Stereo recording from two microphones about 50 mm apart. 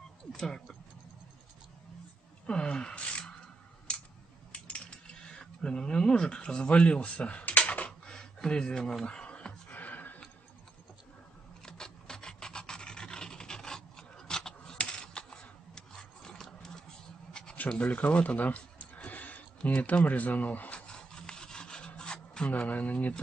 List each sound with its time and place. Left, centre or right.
0.3 s speech: centre
2.4 s speech: centre
4.5 s coin: left
5.1 s speech: centre
8.1 s a sound: centre
9.7 s a sound: left
11.6 s filing: centre
17.3 s a sound: centre
17.6 s speech: left
19.0 s a sound: left
20.8 s rub: centre
22.5 s speech: left